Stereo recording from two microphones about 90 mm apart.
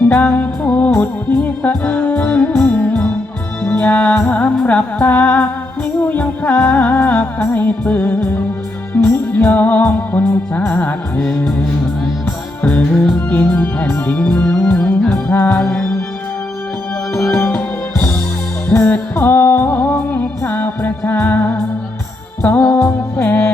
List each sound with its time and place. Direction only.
0.0 s music: 15° left (ahead or behind)
11.2 s music: 5° left (ahead or behind)
13.3 s music: 20° left (ahead or behind)
17.3 s music: 15° left (ahead or behind)